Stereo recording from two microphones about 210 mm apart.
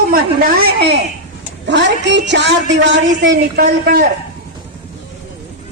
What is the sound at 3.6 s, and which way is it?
Speech, 45° right (ahead or behind).